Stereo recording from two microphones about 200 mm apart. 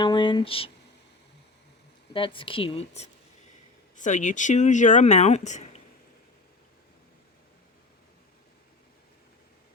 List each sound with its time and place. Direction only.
0.0 s speech: 25° left (ahead or behind)
2.1 s speech: 25° left (ahead or behind)